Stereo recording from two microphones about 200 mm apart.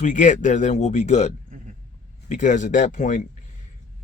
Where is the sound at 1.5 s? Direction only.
40° right (ahead or behind).